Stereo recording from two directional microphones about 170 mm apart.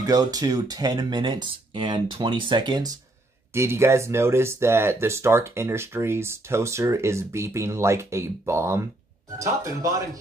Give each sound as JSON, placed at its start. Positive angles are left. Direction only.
{"t": 0.0, "sound": "speech", "side_deg": -20}